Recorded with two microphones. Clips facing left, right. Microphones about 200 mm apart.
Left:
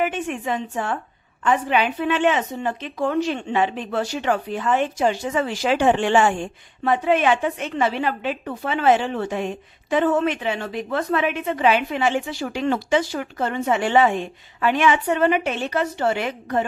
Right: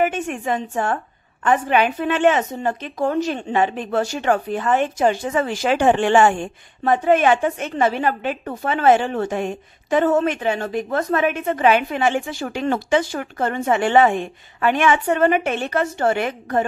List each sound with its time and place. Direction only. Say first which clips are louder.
0.0 s a woman's voice: right 3 dB; 45° right (ahead or behind)